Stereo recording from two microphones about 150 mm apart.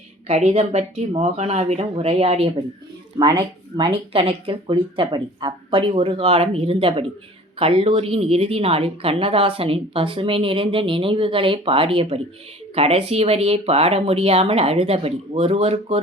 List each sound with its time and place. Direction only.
0.3 s speech: 45° right (ahead or behind)
3.2 s speech: 30° right (ahead or behind); by 16.0 s 45° right (ahead or behind)